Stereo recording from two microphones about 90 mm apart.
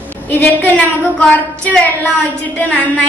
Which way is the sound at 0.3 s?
15° left (ahead or behind).